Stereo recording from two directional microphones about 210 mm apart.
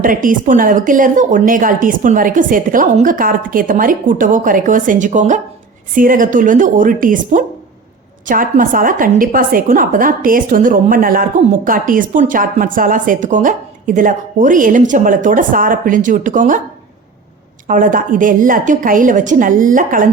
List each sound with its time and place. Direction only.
0.0 s a woman's voice: 40° right (ahead or behind)
17.7 s a woman's voice: 40° right (ahead or behind)